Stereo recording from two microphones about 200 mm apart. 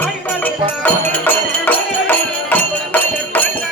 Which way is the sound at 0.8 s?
10° left (ahead or behind).